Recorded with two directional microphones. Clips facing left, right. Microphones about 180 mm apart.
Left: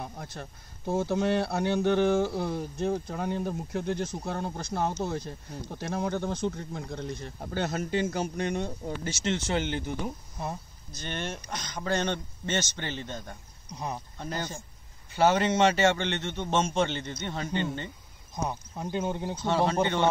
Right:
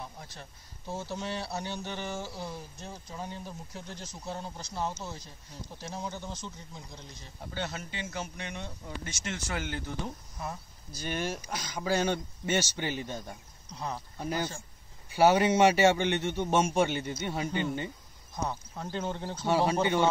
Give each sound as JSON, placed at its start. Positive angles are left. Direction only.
{"t": 0.0, "sound": "speech", "side_deg": 55}
{"t": 11.0, "sound": "a man's voice", "side_deg": -5}
{"t": 13.7, "sound": "speech", "side_deg": 15}
{"t": 14.1, "sound": "a man's voice", "side_deg": -10}
{"t": 18.3, "sound": "speech", "side_deg": 15}
{"t": 19.4, "sound": "a man's voice", "side_deg": -10}